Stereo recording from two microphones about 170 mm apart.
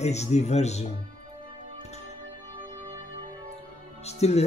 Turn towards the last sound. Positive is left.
turn(degrees=40)  # may be behind; listen again after turning